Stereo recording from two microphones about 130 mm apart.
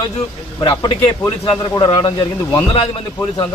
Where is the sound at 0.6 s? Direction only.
35° left (ahead or behind).